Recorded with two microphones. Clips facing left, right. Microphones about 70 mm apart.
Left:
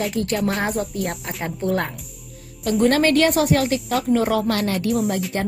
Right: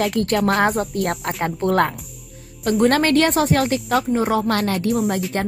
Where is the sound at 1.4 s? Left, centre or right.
Right.